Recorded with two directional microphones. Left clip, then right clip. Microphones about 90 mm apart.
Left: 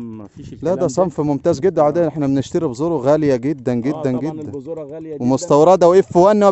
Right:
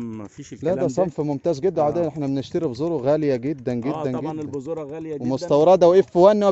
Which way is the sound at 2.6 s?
60° left (ahead or behind).